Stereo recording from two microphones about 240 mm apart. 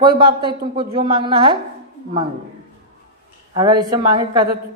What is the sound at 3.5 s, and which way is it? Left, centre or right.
Speech, centre.